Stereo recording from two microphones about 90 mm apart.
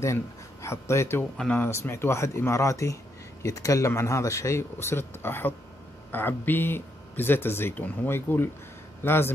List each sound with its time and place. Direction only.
0.0 s speech: 35° left (ahead or behind)